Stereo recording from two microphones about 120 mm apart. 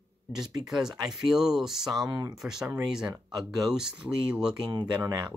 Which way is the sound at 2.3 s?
5° right (ahead or behind).